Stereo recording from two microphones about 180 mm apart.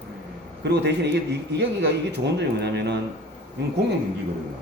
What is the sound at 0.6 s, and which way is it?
A man's voice, 70° right (ahead or behind).